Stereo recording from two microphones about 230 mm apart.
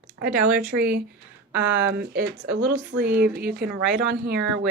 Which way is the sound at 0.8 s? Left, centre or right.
Right.